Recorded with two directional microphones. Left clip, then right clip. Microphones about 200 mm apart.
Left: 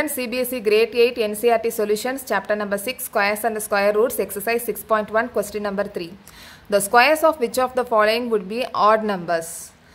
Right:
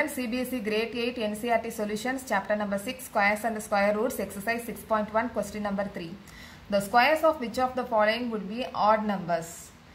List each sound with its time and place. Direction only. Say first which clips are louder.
0.0 s a woman's voice: left 6 dB; 40° left (ahead or behind)